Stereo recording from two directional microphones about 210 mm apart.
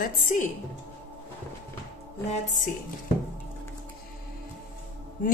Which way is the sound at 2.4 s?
35° left (ahead or behind).